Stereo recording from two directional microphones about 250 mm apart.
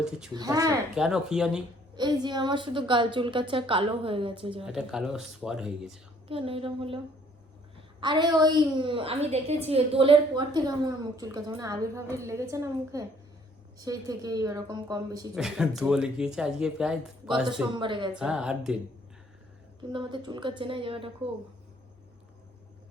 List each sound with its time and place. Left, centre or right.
0.3 s a woman's voice: centre
0.9 s speech: centre
2.0 s a woman's voice: centre
4.6 s speech: centre
6.2 s a woman's voice: right
8.0 s a woman's voice: centre
15.4 s speech: centre
17.7 s a woman's voice: centre
18.1 s speech: centre
19.9 s a woman's voice: centre